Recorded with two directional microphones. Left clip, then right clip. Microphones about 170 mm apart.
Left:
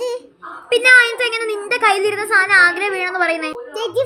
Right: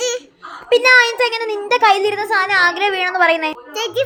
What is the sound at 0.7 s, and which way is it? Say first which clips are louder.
A woman's voice: even; 15° right (ahead or behind).